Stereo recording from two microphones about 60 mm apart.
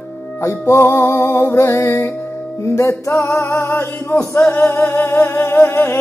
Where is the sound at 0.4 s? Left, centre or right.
Left.